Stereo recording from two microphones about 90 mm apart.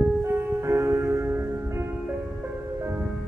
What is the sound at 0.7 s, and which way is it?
Music, 30° right (ahead or behind).